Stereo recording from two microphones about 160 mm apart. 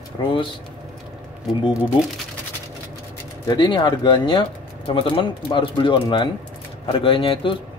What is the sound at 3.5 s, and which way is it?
Speech, 30° left (ahead or behind).